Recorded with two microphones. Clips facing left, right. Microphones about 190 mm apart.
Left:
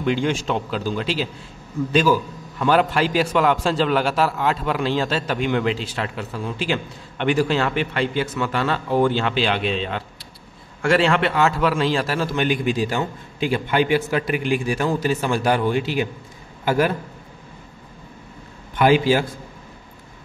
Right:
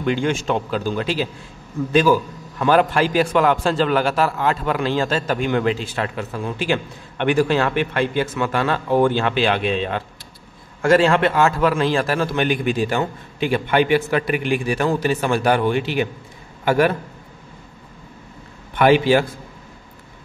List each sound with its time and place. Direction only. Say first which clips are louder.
0.0 s a man's voice: right 1 dB; centre (ahead or behind)
0.3 s a man's voice: right 2 dB; 50° right (ahead or behind)
3.3 s speech: right 1 dB; centre (ahead or behind)
5.1 s a man's voice: right 2 dB; 45° right (ahead or behind); by 16.9 s 65° right (ahead or behind)
18.8 s a man's voice: right 2 dB; 60° right (ahead or behind)